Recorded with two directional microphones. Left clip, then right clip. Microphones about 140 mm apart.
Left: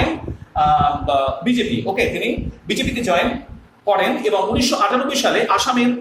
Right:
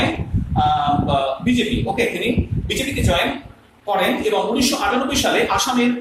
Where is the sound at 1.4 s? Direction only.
25° left (ahead or behind).